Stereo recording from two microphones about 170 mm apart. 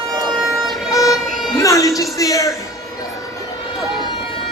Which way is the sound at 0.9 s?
20° left (ahead or behind).